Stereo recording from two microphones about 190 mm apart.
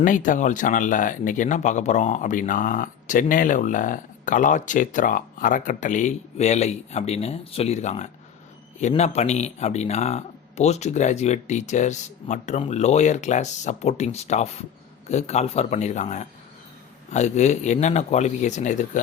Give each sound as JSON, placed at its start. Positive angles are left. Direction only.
{"t": 0.0, "sound": "speech", "side_deg": 45}